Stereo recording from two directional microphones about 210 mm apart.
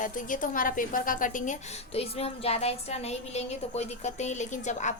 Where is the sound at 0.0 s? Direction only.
40° left (ahead or behind).